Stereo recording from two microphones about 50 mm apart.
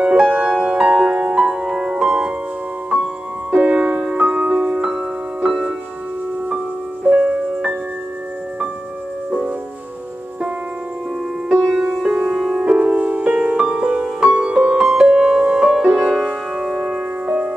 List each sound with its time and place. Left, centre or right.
0.0 s music: centre
3.5 s music: right
7.1 s music: right
11.4 s music: centre
14.8 s music: centre